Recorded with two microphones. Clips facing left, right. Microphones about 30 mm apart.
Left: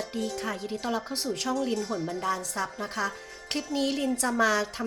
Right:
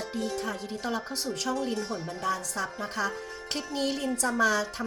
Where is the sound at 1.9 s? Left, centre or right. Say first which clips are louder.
Left 3 dB; left.